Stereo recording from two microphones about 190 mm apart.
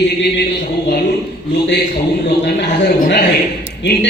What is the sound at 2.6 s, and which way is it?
Speech, 60° left (ahead or behind).